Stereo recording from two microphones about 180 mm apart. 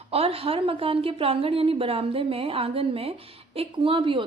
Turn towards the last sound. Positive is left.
turn(degrees=-30)  # may be behind; listen again after turning